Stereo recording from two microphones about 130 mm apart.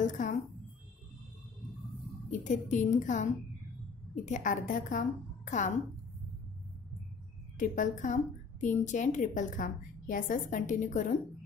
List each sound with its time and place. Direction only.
0.0 s a sound: 75° left (ahead or behind)
2.3 s a woman's voice: 70° left (ahead or behind)
7.5 s a woman's voice: 85° left